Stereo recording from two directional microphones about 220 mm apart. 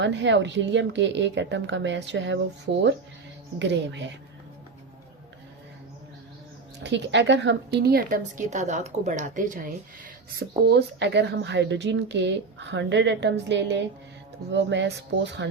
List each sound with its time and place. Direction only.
0.0 s speech: 55° right (ahead or behind)
3.6 s a woman's voice: 55° right (ahead or behind)
6.7 s a woman's voice: 55° right (ahead or behind); by 9.6 s 35° right (ahead or behind)
10.7 s a woman's voice: 50° right (ahead or behind)